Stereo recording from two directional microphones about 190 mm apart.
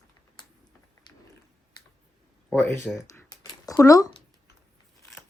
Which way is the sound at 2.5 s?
15° left (ahead or behind).